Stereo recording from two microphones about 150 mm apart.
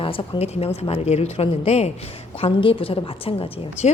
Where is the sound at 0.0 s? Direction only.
35° left (ahead or behind).